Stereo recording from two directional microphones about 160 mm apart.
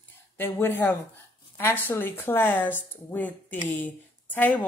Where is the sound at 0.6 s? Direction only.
15° left (ahead or behind).